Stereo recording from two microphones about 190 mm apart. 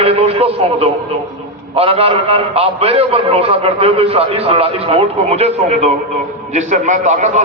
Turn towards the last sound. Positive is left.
turn(degrees=-40)  # may be behind; listen again after turning